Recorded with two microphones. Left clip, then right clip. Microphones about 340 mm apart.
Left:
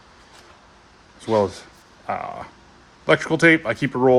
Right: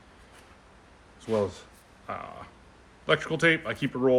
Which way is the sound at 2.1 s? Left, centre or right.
Centre.